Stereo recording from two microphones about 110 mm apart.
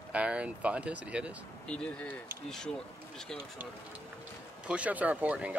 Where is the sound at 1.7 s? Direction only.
10° left (ahead or behind).